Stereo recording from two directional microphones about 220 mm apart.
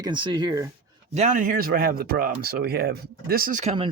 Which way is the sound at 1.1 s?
35° right (ahead or behind).